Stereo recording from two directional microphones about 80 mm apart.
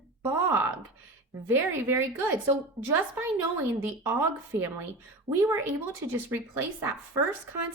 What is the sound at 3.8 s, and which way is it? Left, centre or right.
A woman's voice, right.